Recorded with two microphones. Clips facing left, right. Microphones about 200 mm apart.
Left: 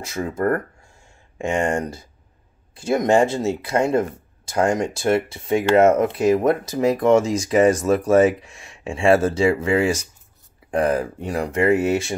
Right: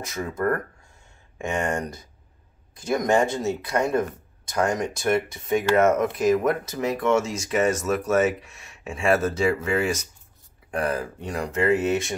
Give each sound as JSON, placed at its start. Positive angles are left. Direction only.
{"t": 0.0, "sound": "speech", "side_deg": 30}
{"t": 1.4, "sound": "speech", "side_deg": 25}